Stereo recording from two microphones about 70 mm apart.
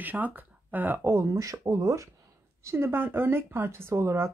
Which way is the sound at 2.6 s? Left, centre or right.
Right.